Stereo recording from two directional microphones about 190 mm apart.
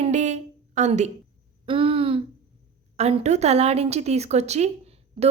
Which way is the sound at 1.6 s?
30° right (ahead or behind).